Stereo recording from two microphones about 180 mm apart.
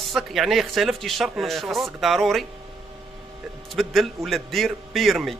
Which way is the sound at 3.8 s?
Centre (ahead or behind).